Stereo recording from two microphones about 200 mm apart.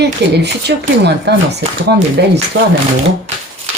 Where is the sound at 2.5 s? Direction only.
80° right.